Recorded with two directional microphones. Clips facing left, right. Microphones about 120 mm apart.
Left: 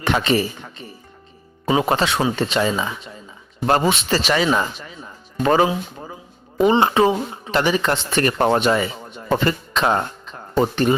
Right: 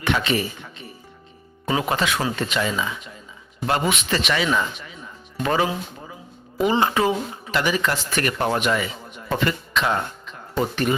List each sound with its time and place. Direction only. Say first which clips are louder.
0.0 s speech: left 3 dB; 35° left (ahead or behind)